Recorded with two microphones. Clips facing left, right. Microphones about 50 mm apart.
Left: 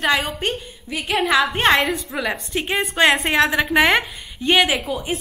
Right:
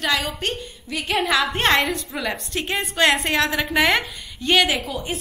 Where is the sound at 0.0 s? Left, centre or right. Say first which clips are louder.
Left 3 dB; centre.